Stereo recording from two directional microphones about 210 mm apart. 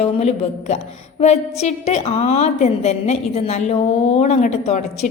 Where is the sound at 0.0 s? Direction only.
30° left (ahead or behind).